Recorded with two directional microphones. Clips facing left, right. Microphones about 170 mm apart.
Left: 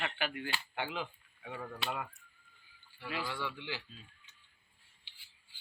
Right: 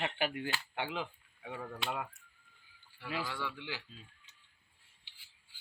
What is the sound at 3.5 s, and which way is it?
Speech, 10° right (ahead or behind).